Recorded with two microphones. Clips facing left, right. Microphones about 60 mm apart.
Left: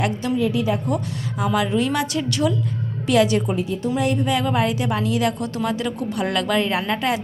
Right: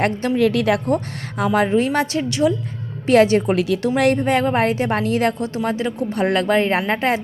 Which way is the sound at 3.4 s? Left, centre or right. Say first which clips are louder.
Right 5 dB; right.